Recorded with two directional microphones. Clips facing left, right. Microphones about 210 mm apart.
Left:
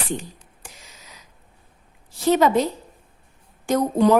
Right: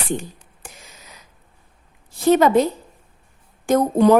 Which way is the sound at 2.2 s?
50° right (ahead or behind).